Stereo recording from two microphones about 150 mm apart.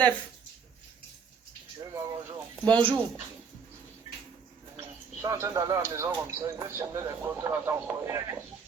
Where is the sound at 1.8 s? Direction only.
25° right (ahead or behind).